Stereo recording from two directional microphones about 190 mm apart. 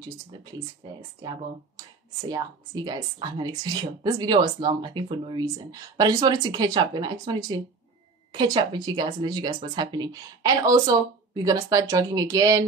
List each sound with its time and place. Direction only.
2.2 s speech: 20° right (ahead or behind)